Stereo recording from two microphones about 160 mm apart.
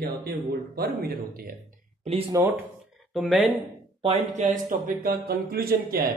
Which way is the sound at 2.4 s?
15° right (ahead or behind).